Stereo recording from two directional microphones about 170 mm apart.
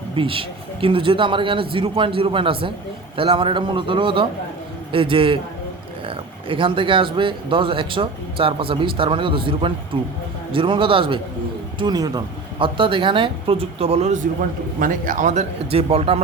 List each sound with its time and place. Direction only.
0.2 s speech: 30° right (ahead or behind)